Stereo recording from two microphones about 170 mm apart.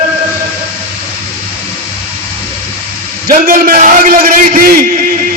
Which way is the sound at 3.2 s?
55° right (ahead or behind).